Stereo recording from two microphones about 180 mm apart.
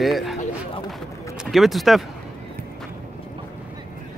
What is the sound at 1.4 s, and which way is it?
Speech, centre (ahead or behind).